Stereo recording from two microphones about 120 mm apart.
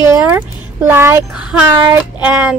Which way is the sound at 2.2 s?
15° right (ahead or behind).